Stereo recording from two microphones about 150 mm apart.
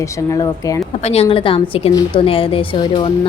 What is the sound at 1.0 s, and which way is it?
Speech, 40° left (ahead or behind).